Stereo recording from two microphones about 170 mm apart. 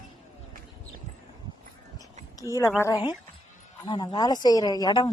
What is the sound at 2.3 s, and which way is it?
A woman's voice, 20° left (ahead or behind).